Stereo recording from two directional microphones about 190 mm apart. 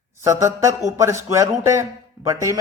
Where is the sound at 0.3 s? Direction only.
15° right (ahead or behind).